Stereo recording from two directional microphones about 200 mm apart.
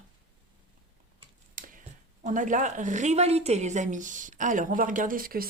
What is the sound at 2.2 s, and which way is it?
A woman's voice, 40° right (ahead or behind).